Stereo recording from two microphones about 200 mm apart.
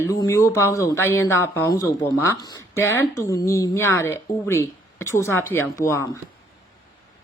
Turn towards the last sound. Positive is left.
turn(degrees=15)  # may be behind; listen again after turning